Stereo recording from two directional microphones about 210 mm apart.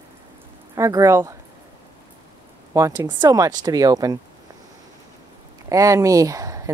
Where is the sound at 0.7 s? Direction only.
15° right (ahead or behind).